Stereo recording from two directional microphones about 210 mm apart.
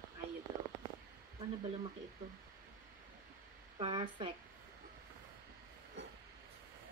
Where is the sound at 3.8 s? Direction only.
25° right (ahead or behind).